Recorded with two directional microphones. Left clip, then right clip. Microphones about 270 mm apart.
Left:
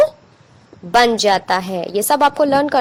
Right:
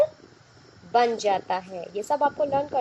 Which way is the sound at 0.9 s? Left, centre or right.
Left.